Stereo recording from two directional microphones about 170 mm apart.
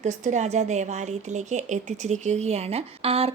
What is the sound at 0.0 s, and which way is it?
A woman's voice, 45° right (ahead or behind).